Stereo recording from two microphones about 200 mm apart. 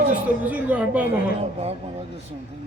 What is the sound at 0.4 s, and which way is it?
Speech, 5° right (ahead or behind).